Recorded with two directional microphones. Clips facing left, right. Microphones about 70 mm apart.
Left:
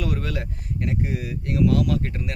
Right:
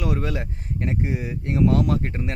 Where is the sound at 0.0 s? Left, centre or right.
Right.